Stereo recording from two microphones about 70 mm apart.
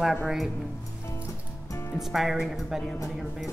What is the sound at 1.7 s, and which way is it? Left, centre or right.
Music, left.